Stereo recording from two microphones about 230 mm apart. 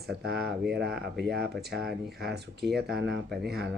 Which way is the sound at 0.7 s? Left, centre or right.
Right.